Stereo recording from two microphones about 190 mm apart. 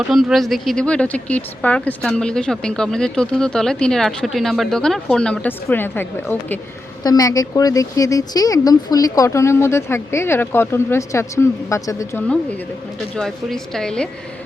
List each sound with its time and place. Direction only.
0.1 s speech: centre (ahead or behind); by 12.2 s 15° left (ahead or behind)
13.1 s speech: centre (ahead or behind)